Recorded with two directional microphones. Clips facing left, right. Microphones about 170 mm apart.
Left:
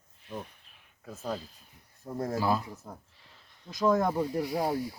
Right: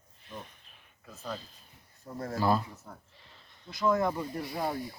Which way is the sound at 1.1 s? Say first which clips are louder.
Left 4 dB; 45° left (ahead or behind).